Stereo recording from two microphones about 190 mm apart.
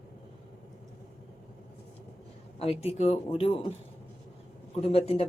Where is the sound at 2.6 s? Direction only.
30° left (ahead or behind).